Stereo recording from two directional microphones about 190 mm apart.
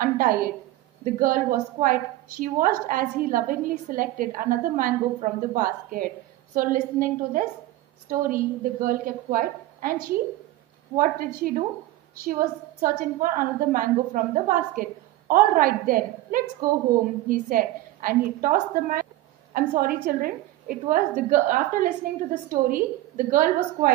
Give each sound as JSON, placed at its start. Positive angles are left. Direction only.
{"t": 0.0, "sound": "a woman's voice", "side_deg": -50}
{"t": 11.0, "sound": "a woman's voice", "side_deg": -50}